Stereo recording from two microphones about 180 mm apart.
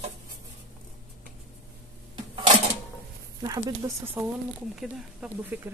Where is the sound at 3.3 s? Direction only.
20° right (ahead or behind).